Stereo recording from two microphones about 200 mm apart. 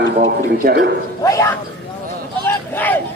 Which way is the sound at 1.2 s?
15° left (ahead or behind).